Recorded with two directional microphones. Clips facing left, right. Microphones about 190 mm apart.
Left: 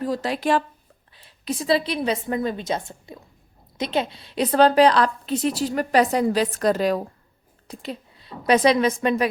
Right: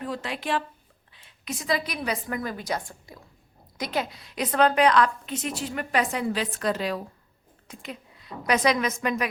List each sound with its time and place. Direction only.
0.0 s a woman's voice: 40° left (ahead or behind)
7.7 s a woman's voice: 30° left (ahead or behind)